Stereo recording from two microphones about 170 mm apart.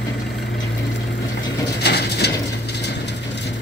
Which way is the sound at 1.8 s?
75° left (ahead or behind).